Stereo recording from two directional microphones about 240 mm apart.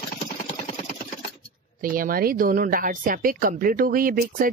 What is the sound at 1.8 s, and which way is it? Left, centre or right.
A woman's voice, right.